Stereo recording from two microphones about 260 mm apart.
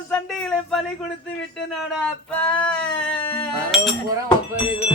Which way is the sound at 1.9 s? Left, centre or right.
Centre.